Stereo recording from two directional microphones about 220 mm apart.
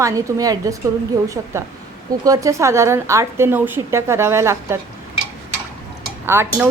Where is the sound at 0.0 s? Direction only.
15° right (ahead or behind).